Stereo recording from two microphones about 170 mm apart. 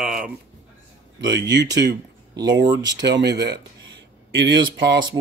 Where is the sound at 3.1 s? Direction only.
75° right (ahead or behind).